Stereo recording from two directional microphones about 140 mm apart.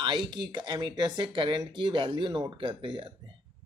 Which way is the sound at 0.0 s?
30° right (ahead or behind).